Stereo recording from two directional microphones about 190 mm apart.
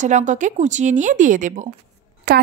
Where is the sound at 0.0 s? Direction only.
40° right (ahead or behind).